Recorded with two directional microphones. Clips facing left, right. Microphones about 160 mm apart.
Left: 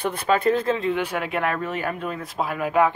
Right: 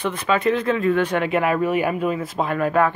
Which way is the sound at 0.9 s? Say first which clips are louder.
Right 5 dB; 10° left (ahead or behind).